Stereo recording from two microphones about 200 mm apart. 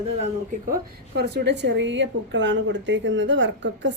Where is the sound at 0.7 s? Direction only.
55° right (ahead or behind).